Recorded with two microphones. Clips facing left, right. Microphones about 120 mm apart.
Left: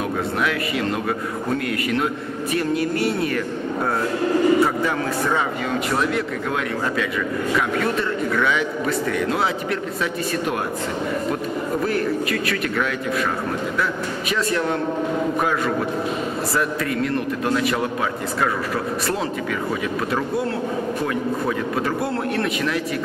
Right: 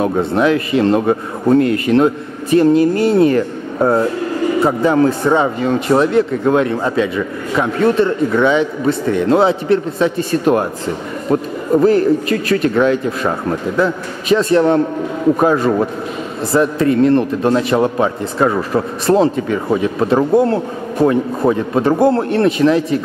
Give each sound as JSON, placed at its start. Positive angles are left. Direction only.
{"t": 0.0, "sound": "a man's voice", "side_deg": -30}
{"t": 11.8, "sound": "a man's voice", "side_deg": -30}